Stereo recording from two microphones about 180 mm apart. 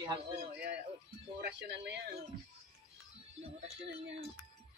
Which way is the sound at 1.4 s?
75° right (ahead or behind).